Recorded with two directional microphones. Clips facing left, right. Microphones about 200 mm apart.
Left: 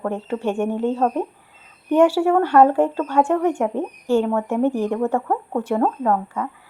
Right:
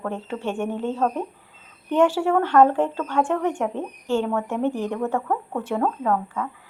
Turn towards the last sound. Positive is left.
turn(degrees=20)  # may be behind; listen again after turning